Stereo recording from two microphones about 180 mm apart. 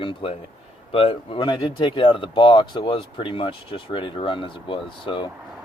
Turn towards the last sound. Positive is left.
turn(degrees=30)  # may be behind; listen again after turning